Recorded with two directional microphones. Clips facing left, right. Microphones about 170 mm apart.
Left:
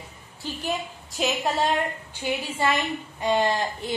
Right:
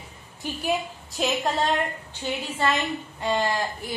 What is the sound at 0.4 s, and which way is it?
Speech, 15° right (ahead or behind).